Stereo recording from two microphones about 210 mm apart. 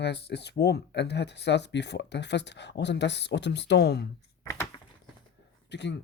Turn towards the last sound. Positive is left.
turn(degrees=55)  # may be behind; listen again after turning